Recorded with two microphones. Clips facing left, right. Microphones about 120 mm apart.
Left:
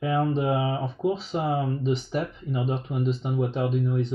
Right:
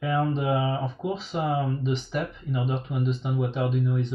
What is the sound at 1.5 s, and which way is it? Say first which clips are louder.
Speech: left 2 dB; 35° left (ahead or behind).